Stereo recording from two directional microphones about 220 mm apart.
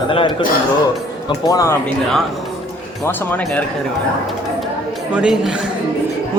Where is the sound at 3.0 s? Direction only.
10° left (ahead or behind).